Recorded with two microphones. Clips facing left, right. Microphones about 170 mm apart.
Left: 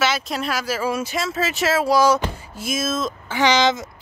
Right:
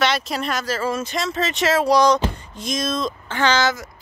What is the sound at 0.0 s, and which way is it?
Speech, 5° left (ahead or behind).